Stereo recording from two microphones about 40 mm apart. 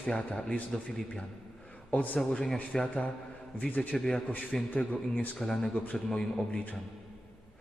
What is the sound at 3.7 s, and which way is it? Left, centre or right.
Speech, left.